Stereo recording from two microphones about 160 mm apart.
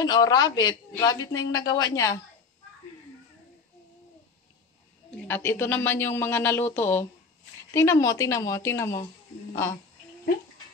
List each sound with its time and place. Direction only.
0.0 s a man's voice: 25° left (ahead or behind)
5.3 s a man's voice: 15° left (ahead or behind)